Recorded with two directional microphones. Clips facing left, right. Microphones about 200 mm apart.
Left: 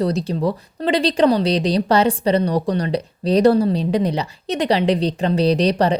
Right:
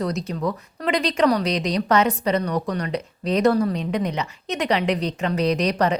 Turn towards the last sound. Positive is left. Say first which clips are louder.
# left 4 dB
turn(degrees=30)  # may be behind; listen again after turning